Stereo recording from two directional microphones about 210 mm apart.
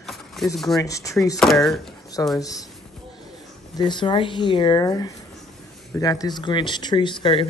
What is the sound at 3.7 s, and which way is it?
Speech, 20° left (ahead or behind).